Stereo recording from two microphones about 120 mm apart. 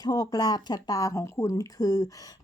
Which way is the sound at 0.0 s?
30° left (ahead or behind).